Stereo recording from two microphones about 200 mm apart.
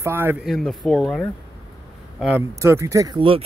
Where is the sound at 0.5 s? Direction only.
Centre (ahead or behind).